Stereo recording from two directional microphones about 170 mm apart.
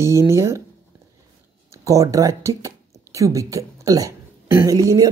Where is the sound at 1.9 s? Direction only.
20° right (ahead or behind).